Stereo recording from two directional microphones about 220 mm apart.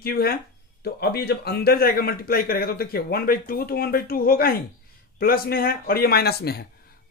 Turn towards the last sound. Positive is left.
turn(degrees=45)  # may be behind; listen again after turning